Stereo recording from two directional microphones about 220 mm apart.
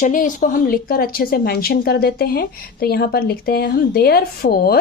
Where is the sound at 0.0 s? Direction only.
35° left (ahead or behind).